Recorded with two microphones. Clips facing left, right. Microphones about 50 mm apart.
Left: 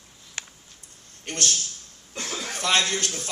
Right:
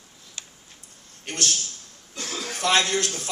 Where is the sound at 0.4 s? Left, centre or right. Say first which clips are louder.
Left 5 dB; left.